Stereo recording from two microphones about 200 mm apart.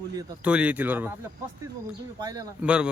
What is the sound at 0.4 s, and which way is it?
Speech, 5° right (ahead or behind).